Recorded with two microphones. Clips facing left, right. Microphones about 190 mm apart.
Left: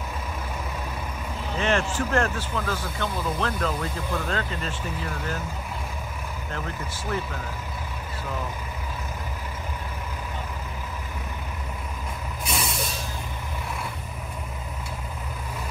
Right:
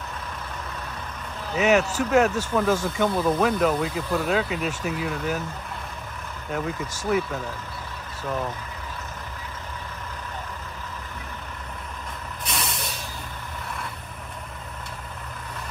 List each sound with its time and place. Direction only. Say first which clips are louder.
1.5 s a man's voice: right 5 dB; 5° right (ahead or behind)
12.4 s vehicle: left 2 dB; centre (ahead or behind)